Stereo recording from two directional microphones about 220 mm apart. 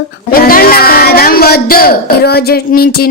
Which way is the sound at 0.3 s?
40° left (ahead or behind).